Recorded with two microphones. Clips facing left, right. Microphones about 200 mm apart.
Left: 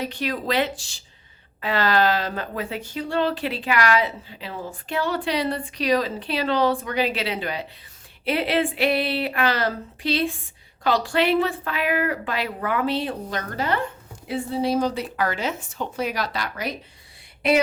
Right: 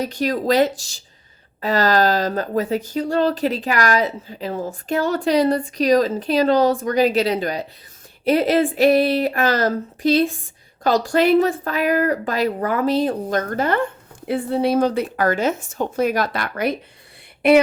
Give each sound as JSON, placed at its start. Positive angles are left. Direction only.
{"t": 0.0, "sound": "speech", "side_deg": -40}